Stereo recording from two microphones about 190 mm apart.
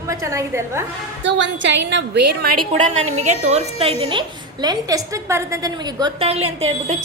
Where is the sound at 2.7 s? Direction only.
35° right (ahead or behind).